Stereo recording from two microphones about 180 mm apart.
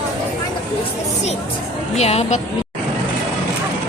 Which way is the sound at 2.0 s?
35° left (ahead or behind).